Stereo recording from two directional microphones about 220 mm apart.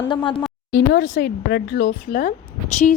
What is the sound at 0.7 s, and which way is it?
A woman's voice, 45° left (ahead or behind).